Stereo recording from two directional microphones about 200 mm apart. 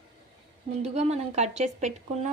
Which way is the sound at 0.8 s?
35° right (ahead or behind).